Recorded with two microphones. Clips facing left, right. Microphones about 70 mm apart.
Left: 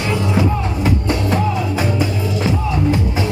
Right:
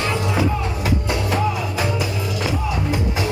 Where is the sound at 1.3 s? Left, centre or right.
Left.